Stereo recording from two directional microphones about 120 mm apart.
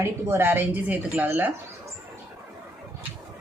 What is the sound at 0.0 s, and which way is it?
Speech, 20° right (ahead or behind).